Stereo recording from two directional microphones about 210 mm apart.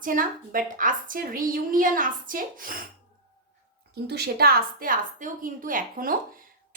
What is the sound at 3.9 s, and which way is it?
A woman's voice, 50° right (ahead or behind).